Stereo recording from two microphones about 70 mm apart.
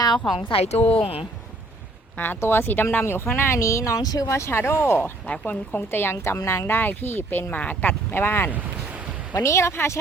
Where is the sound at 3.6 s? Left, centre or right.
Left.